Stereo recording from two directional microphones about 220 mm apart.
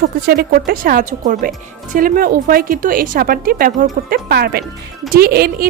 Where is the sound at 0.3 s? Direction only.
40° right (ahead or behind).